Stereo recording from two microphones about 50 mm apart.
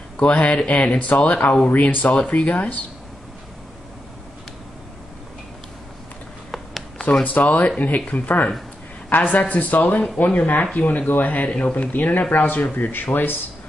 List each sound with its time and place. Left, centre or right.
0.2 s speech: left
7.2 s speech: left
10.6 s speech: left
11.1 s speech: left